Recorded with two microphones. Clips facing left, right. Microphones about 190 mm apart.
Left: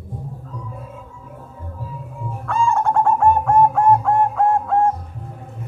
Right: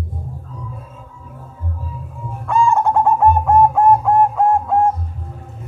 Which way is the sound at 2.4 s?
15° right (ahead or behind).